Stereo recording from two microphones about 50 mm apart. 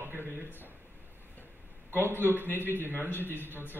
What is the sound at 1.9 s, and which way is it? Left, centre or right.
A man's voice, right.